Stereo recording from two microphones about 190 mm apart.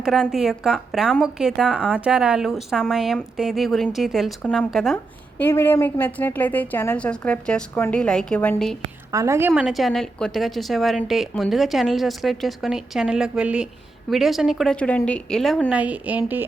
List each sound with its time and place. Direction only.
0.0 s a woman's voice: centre (ahead or behind)
9.1 s a woman's voice: 15° right (ahead or behind)
9.5 s a woman's voice: centre (ahead or behind)